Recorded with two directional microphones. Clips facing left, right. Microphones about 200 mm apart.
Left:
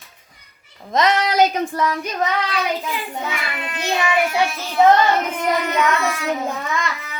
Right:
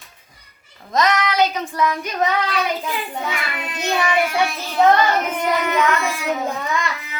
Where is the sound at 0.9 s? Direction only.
30° left (ahead or behind).